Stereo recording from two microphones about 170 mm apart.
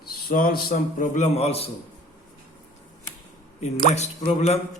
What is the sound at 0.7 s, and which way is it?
Speech, 45° left (ahead or behind).